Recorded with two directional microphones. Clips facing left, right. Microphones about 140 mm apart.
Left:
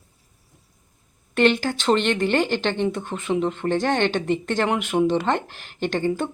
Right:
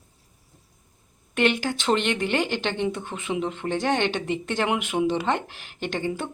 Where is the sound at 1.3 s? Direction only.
10° right (ahead or behind).